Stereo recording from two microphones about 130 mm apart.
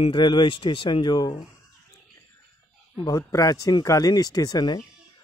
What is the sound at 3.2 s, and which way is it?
Speech, 25° left (ahead or behind).